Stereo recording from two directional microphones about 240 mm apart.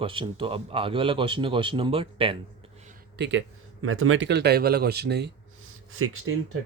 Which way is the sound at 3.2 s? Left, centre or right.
Right.